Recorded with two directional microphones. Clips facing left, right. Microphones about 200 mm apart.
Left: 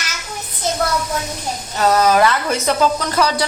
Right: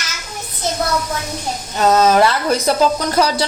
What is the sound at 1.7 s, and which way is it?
Speech, 20° right (ahead or behind).